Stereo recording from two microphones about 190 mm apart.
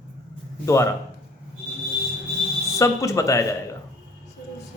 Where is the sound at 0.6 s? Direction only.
15° left (ahead or behind).